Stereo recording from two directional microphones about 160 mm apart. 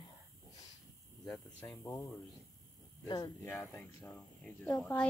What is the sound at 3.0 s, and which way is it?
Speech, 25° left (ahead or behind).